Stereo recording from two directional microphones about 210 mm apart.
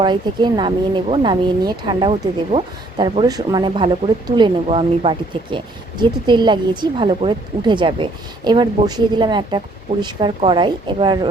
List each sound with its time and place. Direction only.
0.0 s speech: 20° right (ahead or behind)